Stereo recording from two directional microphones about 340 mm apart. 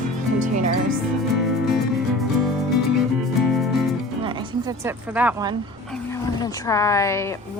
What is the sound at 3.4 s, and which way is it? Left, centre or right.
Music, centre.